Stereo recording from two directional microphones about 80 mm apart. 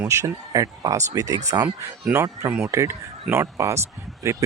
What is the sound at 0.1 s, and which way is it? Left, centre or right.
Speech, right.